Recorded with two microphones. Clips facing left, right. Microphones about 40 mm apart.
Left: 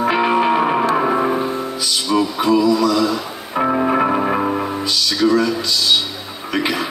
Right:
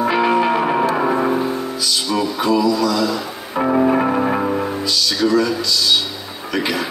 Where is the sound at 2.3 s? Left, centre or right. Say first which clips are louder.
Left 1 dB; left.